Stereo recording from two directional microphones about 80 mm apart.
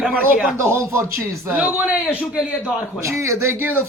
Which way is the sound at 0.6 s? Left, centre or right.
Right.